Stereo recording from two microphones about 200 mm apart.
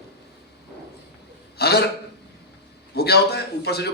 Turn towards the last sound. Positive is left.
turn(degrees=55)  # may be behind; listen again after turning